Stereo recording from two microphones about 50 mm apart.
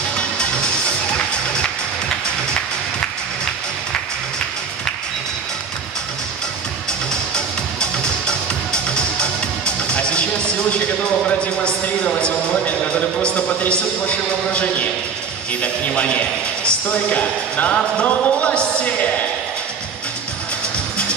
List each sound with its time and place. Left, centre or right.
0.1 s music: centre
6.9 s music: centre
15.6 s a man's voice: left
17.9 s music: left